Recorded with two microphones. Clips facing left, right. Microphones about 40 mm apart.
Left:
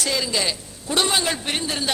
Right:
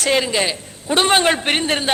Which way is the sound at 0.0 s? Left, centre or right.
Right.